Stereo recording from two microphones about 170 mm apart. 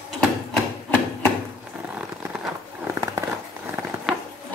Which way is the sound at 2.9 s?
15° right (ahead or behind).